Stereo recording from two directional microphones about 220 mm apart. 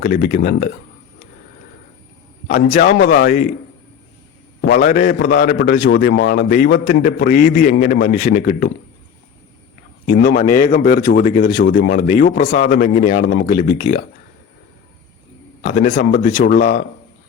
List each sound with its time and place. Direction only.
0.0 s a man's voice: 40° left (ahead or behind)
2.5 s a man's voice: 40° left (ahead or behind)
4.6 s a man's voice: 40° left (ahead or behind)
10.1 s a man's voice: 35° left (ahead or behind)
15.6 s a man's voice: 35° left (ahead or behind)